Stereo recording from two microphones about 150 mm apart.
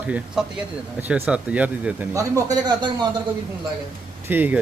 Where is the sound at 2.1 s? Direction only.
20° right (ahead or behind).